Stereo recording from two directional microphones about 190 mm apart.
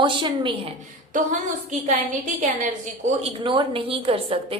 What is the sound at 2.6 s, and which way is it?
Speech, 35° right (ahead or behind).